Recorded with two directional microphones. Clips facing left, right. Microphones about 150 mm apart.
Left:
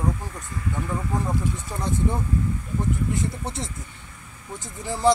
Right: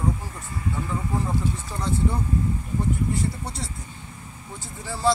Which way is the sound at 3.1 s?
20° left (ahead or behind).